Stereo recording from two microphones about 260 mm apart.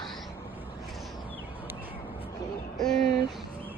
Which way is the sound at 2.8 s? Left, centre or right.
Centre.